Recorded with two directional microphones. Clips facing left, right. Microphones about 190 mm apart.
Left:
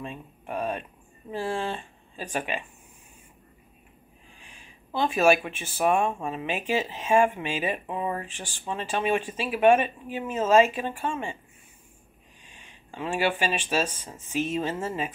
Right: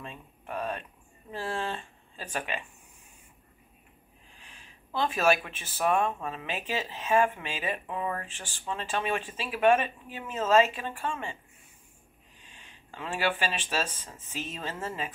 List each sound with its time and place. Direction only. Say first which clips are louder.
0.0 s speech: left 6 dB; 15° left (ahead or behind)
4.5 s speech: left 3 dB; 10° left (ahead or behind)
12.5 s speech: left 6 dB; 15° left (ahead or behind)